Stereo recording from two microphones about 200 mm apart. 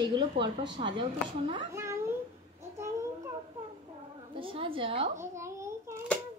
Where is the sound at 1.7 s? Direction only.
15° right (ahead or behind).